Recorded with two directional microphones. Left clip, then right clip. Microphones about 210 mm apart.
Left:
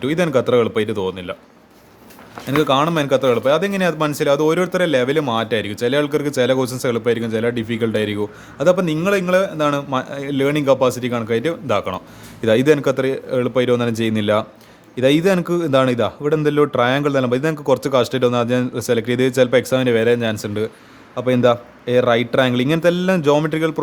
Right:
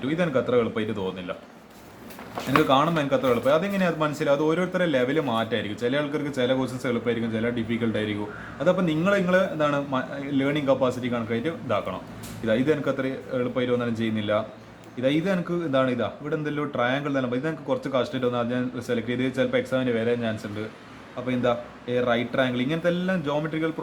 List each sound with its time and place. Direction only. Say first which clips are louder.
0.0 s speech: left 7 dB; 50° left (ahead or behind)
2.6 s speech: left 5 dB; 45° left (ahead or behind)